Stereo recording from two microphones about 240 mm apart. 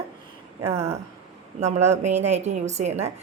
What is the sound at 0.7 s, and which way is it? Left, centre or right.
A woman's voice, right.